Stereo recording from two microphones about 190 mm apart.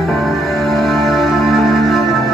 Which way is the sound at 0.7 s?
Centre (ahead or behind).